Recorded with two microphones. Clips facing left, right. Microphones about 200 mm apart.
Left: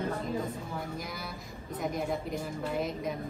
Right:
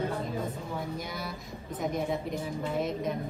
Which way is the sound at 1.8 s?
Centre (ahead or behind).